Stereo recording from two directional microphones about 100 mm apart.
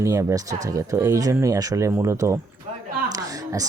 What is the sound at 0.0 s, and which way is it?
Speech, 30° right (ahead or behind).